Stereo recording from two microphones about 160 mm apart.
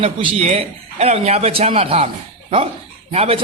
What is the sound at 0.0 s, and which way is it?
A man's voice, 35° right (ahead or behind).